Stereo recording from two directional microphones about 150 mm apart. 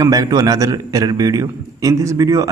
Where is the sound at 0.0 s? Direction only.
25° right (ahead or behind).